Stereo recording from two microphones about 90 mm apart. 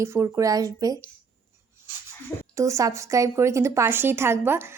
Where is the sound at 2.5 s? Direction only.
35° right (ahead or behind).